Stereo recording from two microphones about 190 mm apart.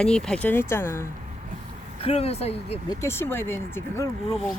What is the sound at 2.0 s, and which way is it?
Speech, 30° left (ahead or behind).